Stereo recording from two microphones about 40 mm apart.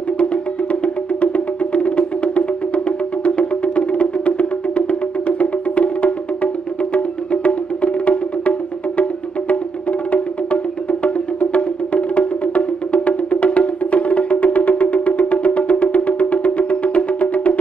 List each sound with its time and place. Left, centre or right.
0.2 s music: left